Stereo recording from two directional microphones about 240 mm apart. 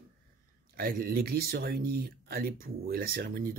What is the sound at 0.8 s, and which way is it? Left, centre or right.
Speech, right.